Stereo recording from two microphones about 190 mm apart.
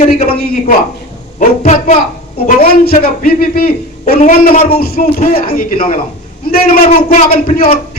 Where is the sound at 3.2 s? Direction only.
50° left (ahead or behind).